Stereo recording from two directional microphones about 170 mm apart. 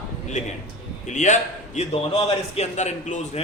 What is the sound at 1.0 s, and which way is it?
A man's voice, 45° left (ahead or behind).